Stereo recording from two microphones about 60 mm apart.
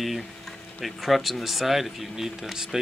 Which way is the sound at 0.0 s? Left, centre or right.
Centre.